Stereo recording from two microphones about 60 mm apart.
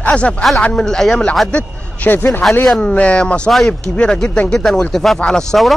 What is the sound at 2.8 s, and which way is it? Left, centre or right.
A man's voice, centre.